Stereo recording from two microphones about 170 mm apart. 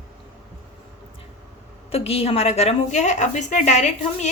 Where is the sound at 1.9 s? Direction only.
35° left (ahead or behind).